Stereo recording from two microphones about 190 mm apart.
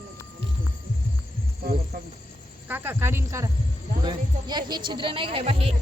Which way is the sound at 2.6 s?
10° right (ahead or behind).